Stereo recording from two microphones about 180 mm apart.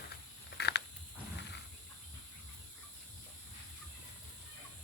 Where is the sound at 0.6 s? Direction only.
65° left (ahead or behind).